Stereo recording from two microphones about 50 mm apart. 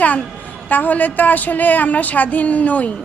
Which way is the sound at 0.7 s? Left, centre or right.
Left.